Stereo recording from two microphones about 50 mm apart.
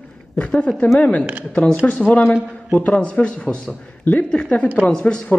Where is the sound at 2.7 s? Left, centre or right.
Left.